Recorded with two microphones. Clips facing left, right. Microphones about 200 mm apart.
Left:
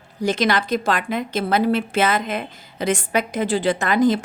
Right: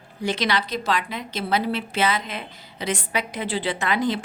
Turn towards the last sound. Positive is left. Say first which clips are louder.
# left 6 dB
turn(degrees=45)  # may be behind; listen again after turning